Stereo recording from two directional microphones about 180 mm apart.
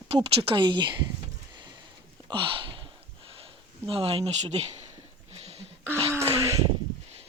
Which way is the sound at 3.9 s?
30° right (ahead or behind).